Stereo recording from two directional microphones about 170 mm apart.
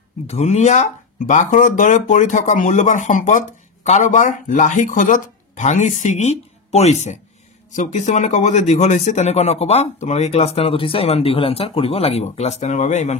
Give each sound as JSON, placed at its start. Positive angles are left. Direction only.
{"t": 0.3, "sound": "speech", "side_deg": 40}